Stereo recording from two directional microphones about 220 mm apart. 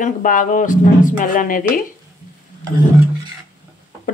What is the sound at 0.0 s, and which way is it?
Speech, 35° left (ahead or behind).